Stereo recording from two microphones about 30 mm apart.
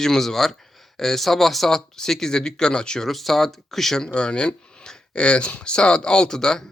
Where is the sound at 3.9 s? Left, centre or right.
Left.